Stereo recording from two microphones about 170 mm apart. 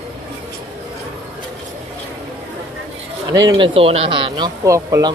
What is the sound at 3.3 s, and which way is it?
Speech, 20° right (ahead or behind).